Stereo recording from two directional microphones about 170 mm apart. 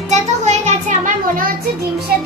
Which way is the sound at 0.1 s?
40° right (ahead or behind).